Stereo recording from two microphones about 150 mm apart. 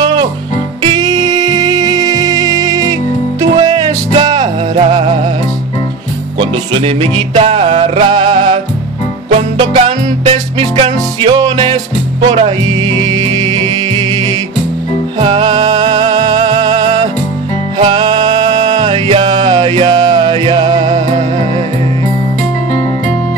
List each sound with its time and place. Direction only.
0.0 s music: 30° right (ahead or behind)
3.5 s music: 35° right (ahead or behind)
6.7 s music: 35° right (ahead or behind)
9.6 s music: 40° right (ahead or behind)
15.1 s music: 35° right (ahead or behind)